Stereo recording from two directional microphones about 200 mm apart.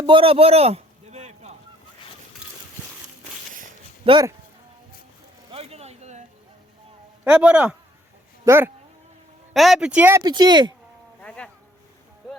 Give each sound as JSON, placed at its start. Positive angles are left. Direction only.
{"t": 0.0, "sound": "a sound", "side_deg": -25}
{"t": 4.0, "sound": "speech", "side_deg": -25}
{"t": 5.5, "sound": "a sound", "side_deg": -30}
{"t": 7.3, "sound": "a man's voice", "side_deg": -5}
{"t": 9.5, "sound": "speech", "side_deg": 0}
{"t": 11.2, "sound": "insect", "side_deg": 5}